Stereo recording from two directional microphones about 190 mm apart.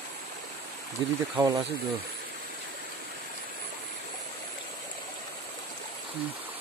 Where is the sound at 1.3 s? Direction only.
15° right (ahead or behind).